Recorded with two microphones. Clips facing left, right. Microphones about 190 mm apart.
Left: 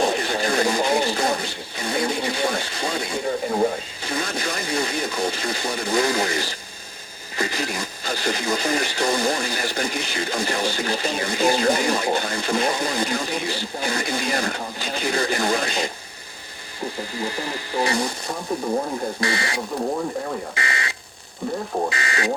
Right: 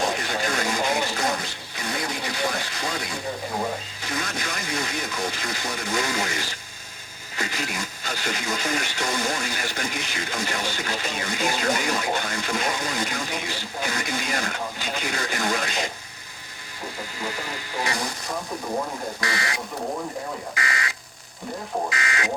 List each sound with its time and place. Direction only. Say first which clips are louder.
0.0 s a sound: left 4 dB; 30° left (ahead or behind)
4.0 s speech: left 5 dB; 30° left (ahead or behind)
17.2 s speech: left 3 dB; 35° left (ahead or behind)
19.2 s speech: left 4 dB; 30° left (ahead or behind)